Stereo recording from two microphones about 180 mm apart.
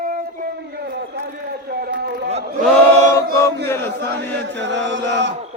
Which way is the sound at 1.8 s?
65° right (ahead or behind).